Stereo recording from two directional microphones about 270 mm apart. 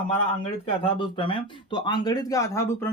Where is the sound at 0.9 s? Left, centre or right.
Centre.